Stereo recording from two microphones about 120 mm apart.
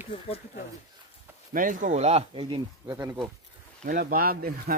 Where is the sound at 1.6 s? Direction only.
90° right; by 2.2 s 65° right (ahead or behind).